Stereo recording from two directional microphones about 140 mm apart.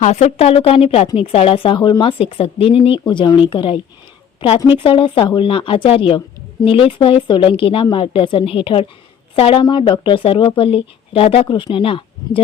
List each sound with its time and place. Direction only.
0.0 s speech: 55° left (ahead or behind)